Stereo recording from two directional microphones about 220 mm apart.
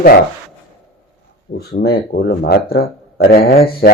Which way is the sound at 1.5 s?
45° left (ahead or behind).